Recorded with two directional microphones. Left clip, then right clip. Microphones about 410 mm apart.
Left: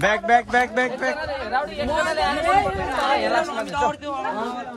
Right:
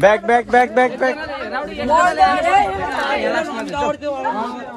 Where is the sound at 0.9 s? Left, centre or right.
Left.